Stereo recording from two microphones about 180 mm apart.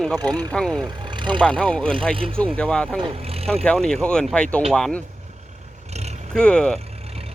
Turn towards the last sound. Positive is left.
turn(degrees=5)  # may be behind; listen again after turning